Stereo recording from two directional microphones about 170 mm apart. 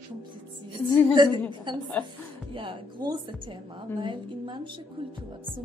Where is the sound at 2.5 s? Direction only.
30° right (ahead or behind).